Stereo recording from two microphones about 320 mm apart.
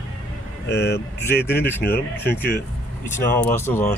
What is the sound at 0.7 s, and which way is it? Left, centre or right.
Speech, left.